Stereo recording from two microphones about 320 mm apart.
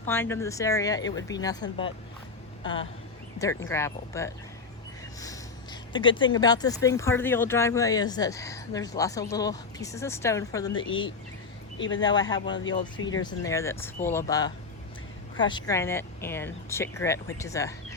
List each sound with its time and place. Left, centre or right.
0.1 s speech: centre
3.3 s speech: centre
5.9 s speech: centre
12.0 s speech: centre
13.0 s speech: left
13.2 s speech: centre